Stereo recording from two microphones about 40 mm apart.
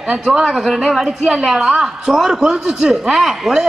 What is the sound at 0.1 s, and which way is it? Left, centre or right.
A woman's voice, centre.